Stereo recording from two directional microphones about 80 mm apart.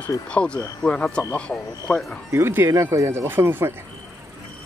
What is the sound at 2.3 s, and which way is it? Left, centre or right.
Speech, right.